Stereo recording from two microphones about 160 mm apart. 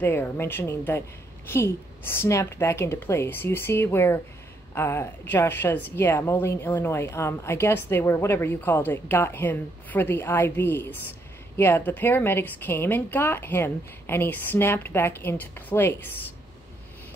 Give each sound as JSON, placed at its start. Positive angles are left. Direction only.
{"t": 0.0, "sound": "a woman's voice", "side_deg": 15}